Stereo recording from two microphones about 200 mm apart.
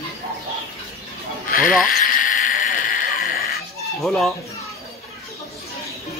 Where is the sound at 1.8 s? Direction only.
45° left (ahead or behind).